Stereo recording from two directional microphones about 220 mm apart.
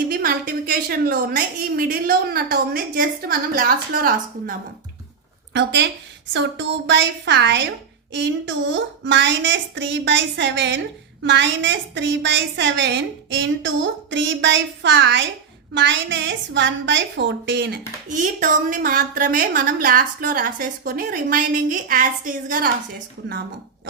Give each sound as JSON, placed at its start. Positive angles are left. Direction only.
{"t": 0.1, "sound": "a woman's voice", "side_deg": -40}
{"t": 5.5, "sound": "a woman's voice", "side_deg": -50}
{"t": 18.2, "sound": "a woman's voice", "side_deg": -35}